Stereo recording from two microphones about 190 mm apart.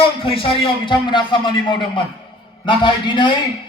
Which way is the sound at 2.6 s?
25° left (ahead or behind).